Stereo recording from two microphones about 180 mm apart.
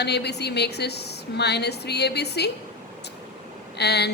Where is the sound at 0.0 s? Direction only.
65° left (ahead or behind).